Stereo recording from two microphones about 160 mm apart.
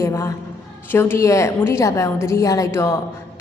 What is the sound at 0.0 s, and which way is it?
A woman's voice, 20° left (ahead or behind).